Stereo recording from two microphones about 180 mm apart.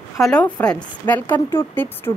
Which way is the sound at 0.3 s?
5° left (ahead or behind).